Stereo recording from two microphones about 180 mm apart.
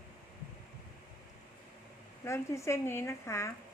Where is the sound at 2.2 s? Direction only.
15° left (ahead or behind).